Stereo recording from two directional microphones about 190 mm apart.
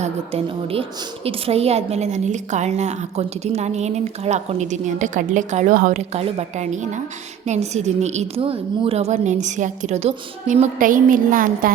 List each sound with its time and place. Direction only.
0.0 s a woman's voice: 30° right (ahead or behind)